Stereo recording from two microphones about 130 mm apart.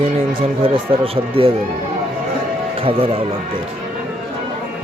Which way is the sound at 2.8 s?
45° right (ahead or behind).